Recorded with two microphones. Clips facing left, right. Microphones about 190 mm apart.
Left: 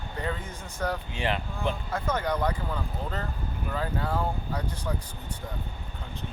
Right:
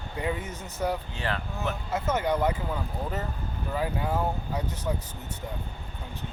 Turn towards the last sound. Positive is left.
turn(degrees=-15)  # may be behind; listen again after turning